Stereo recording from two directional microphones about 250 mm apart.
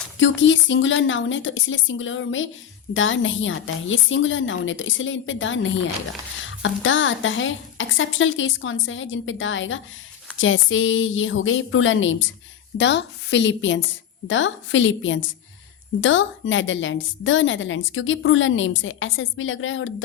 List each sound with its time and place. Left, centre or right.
0.2 s a woman's voice: left